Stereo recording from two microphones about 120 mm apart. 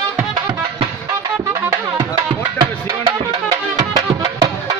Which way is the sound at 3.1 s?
30° right (ahead or behind).